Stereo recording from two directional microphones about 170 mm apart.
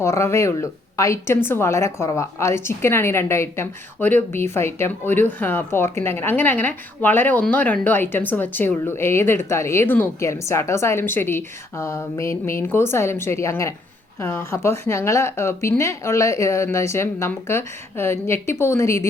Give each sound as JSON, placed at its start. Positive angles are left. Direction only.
{"t": 0.0, "sound": "speech", "side_deg": 15}